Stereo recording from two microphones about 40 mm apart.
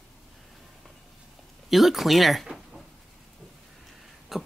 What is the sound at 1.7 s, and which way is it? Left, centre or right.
Speech, centre.